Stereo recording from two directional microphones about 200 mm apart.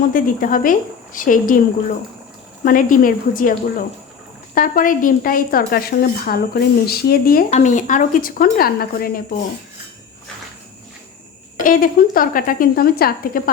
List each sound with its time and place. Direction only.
0.1 s speech: 45° left (ahead or behind)
2.6 s speech: 45° left (ahead or behind)
4.5 s speech: 45° left (ahead or behind)
11.5 s speech: 45° left (ahead or behind)